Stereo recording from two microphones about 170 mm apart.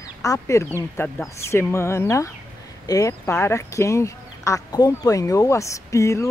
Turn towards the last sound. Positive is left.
turn(degrees=20)  # may be behind; listen again after turning